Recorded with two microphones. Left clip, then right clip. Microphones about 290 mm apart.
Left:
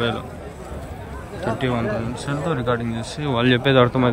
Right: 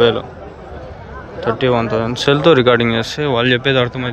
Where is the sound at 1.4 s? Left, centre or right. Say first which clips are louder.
Right 8 dB; centre.